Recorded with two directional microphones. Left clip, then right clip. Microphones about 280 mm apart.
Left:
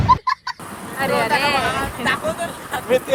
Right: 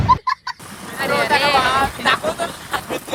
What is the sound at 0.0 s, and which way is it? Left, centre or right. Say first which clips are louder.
Fowl: even; centre.